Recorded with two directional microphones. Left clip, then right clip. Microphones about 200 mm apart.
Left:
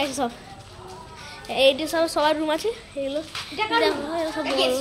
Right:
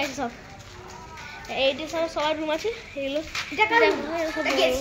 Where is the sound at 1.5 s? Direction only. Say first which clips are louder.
Left 5 dB; 25° left (ahead or behind).